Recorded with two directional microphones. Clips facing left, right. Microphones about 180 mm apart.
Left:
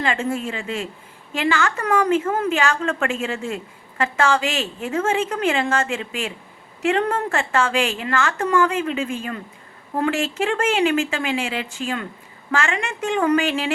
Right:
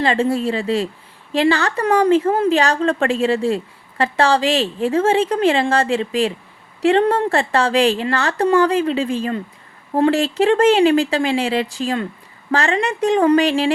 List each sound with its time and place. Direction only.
0.0 s a woman's voice: 35° right (ahead or behind)